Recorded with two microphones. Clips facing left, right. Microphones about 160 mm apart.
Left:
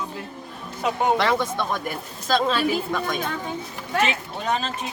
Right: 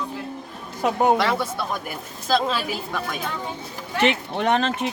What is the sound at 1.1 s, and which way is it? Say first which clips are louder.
Speech: even; 10° right (ahead or behind).